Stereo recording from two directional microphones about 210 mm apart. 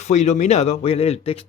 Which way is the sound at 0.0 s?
30° left (ahead or behind).